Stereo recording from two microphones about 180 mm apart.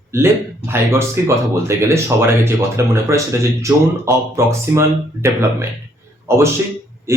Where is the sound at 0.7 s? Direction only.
15° right (ahead or behind).